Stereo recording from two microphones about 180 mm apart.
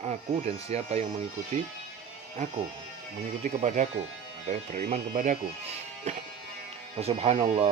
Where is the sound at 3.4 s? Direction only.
45° right (ahead or behind).